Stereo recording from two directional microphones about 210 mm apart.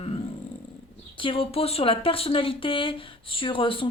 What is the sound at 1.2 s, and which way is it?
Speech, 25° left (ahead or behind).